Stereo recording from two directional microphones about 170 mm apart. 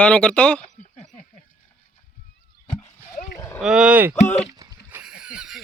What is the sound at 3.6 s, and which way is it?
Speech, 5° right (ahead or behind).